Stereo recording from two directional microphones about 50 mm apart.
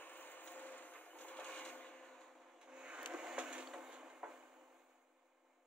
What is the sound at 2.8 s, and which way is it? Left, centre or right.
Printer, centre.